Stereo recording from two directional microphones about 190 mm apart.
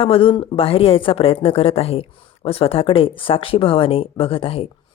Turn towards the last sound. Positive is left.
turn(degrees=30)  # may be behind; listen again after turning